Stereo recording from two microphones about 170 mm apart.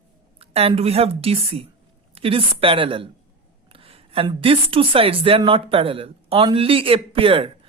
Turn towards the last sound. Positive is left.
turn(degrees=-30)  # may be behind; listen again after turning